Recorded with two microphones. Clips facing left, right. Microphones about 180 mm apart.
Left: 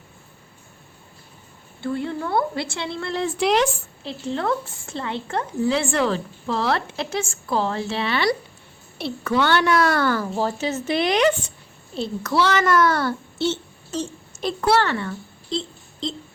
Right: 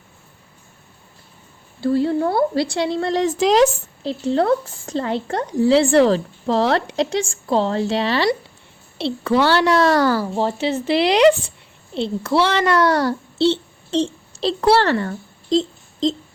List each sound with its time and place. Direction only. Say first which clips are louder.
1.8 s a child's voice: right 8 dB; 35° right (ahead or behind)
15.4 s wail: right 10 dB; 90° right